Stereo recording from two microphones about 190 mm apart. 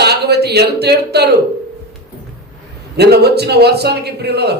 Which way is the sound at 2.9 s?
60° right (ahead or behind).